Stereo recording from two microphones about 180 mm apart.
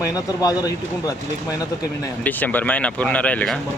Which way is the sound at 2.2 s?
10° left (ahead or behind).